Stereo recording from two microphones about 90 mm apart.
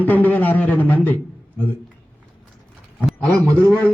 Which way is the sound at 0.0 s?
20° left (ahead or behind).